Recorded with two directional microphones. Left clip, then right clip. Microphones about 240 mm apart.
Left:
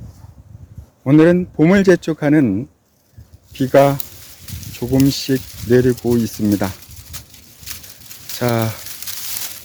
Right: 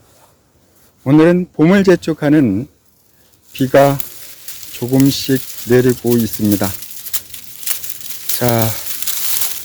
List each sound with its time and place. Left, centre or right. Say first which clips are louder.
1.0 s speech: right 1 dB; centre
5.0 s speech: right 3 dB; centre
7.1 s a sound: right 9 dB; right
8.4 s speech: right 3 dB; centre
9.1 s crumpling: right 6 dB; right